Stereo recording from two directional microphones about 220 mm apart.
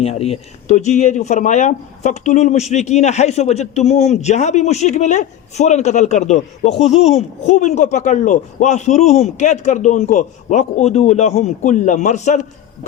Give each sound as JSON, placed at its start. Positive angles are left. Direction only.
{"t": 0.0, "sound": "speech", "side_deg": 25}